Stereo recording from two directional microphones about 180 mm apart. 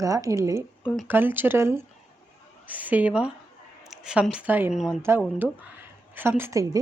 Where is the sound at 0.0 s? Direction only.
20° right (ahead or behind).